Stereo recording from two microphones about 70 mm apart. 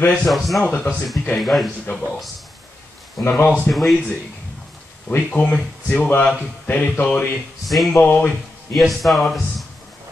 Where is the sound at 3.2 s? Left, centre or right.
Left.